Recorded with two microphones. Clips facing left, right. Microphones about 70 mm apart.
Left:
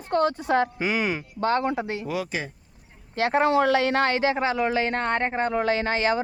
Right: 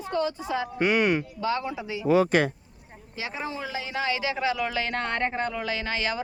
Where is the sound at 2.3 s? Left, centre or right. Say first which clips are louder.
Right 9 dB; right.